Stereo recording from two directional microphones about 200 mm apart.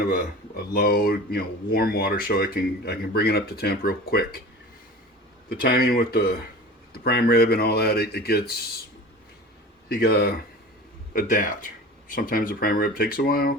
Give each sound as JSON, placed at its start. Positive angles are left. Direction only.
{"t": 0.7, "sound": "speech", "side_deg": 50}
{"t": 5.5, "sound": "speech", "side_deg": 50}
{"t": 9.9, "sound": "speech", "side_deg": 50}